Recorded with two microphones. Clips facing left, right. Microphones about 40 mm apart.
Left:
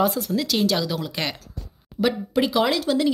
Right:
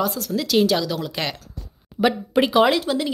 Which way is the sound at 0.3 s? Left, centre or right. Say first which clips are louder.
Right 3 dB; centre.